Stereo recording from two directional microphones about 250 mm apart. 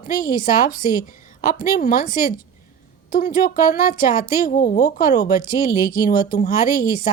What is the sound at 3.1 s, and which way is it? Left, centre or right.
Speech, left.